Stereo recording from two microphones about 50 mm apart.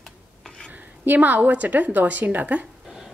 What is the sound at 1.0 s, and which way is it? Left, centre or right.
A woman's voice, right.